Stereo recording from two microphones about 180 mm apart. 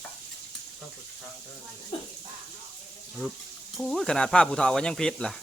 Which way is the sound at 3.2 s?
Centre (ahead or behind).